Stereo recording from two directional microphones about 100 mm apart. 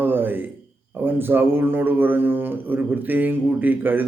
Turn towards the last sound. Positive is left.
turn(degrees=-20)  # may be behind; listen again after turning